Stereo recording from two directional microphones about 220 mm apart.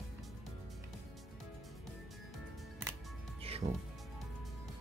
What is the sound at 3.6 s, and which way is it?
Speech, 30° right (ahead or behind).